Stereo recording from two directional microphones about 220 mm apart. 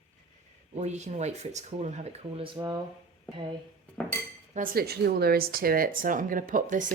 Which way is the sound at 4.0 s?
5° left (ahead or behind).